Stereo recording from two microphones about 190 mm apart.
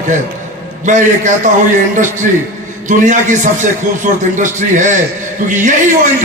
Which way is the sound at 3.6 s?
40° right (ahead or behind).